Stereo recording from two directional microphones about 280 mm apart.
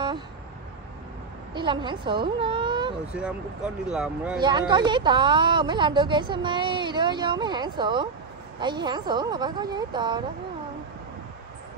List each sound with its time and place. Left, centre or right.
1.5 s a woman's voice: centre
3.1 s speech: centre
4.4 s a woman's voice: centre